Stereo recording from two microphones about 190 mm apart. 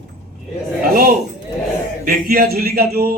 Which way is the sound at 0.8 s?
50° right (ahead or behind).